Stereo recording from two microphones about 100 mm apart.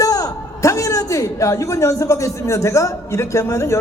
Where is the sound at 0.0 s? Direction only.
35° left (ahead or behind).